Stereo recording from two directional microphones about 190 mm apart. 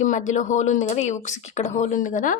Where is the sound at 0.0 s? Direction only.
40° left (ahead or behind).